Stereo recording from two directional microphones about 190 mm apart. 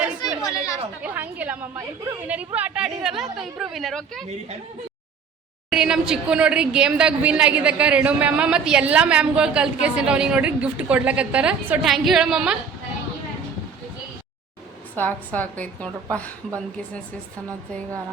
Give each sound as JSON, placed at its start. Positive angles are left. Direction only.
{"t": 0.2, "sound": "chatter", "side_deg": 20}
{"t": 1.0, "sound": "a woman's voice", "side_deg": -10}
{"t": 5.7, "sound": "a woman's voice", "side_deg": -5}
{"t": 14.9, "sound": "a woman's voice", "side_deg": 10}